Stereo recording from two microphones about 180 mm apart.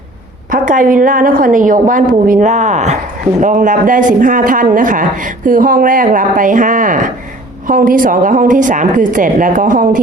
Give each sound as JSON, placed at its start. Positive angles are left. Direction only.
{"t": 0.5, "sound": "speech", "side_deg": -45}